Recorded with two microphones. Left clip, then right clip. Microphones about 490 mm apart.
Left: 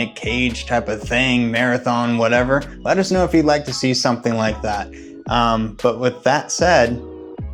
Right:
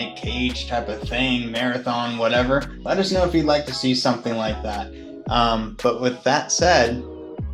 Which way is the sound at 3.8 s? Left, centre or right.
Left.